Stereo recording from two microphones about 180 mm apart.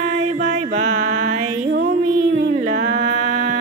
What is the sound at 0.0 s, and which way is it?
Music, 40° right (ahead or behind).